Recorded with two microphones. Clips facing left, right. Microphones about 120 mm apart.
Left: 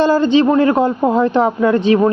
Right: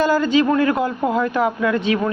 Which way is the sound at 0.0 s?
30° left (ahead or behind).